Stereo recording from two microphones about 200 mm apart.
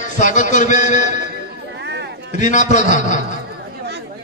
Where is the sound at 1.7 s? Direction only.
60° right (ahead or behind).